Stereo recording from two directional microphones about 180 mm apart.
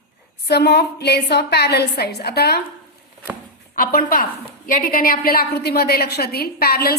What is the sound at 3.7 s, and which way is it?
A woman's voice, 55° left (ahead or behind).